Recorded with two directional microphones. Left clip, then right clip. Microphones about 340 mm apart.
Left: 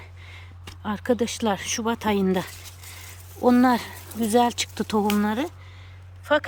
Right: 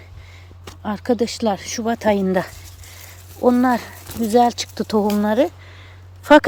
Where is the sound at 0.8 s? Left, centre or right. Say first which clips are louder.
Right 4 dB; centre.